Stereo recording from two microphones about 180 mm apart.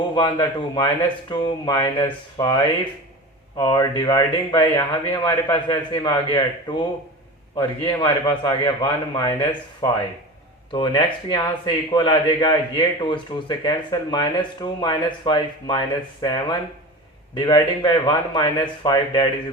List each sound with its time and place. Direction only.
0.1 s speech: 25° left (ahead or behind)